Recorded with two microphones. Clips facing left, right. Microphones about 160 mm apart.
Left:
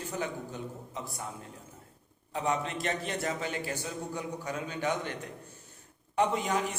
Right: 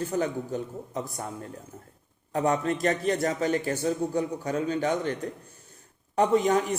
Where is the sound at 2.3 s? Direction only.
45° right (ahead or behind).